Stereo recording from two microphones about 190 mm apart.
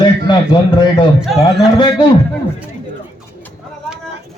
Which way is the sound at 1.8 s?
25° left (ahead or behind).